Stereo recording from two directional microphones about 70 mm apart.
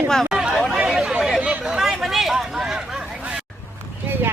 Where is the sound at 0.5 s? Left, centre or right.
Centre.